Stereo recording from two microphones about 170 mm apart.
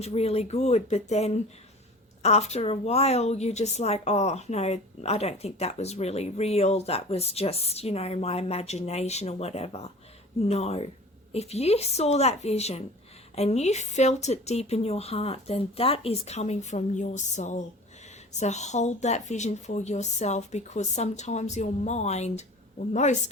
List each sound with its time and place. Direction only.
0.0 s a woman's voice: 40° left (ahead or behind)